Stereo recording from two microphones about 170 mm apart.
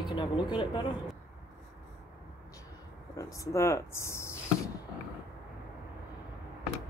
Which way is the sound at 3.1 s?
20° left (ahead or behind).